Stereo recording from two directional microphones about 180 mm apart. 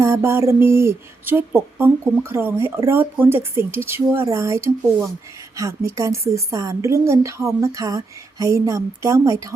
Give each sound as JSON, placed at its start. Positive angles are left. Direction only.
{"t": 0.0, "sound": "a woman's voice", "side_deg": -15}